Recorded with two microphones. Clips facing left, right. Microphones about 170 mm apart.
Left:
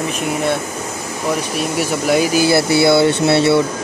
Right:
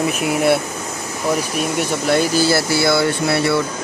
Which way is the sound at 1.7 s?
10° left (ahead or behind).